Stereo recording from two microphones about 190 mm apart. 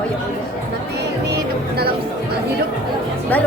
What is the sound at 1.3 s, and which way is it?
Music, 55° right (ahead or behind).